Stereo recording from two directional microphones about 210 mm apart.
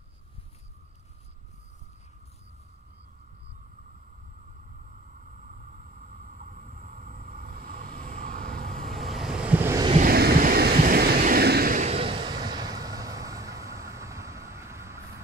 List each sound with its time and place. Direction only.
6.2 s vehicle: 40° right (ahead or behind)
8.3 s vehicle: 5° left (ahead or behind); by 9.8 s 10° right (ahead or behind)
10.0 s vehicle: 45° right (ahead or behind); by 15.0 s 15° right (ahead or behind)